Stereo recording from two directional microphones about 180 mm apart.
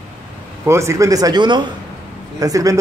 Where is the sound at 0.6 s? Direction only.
15° right (ahead or behind).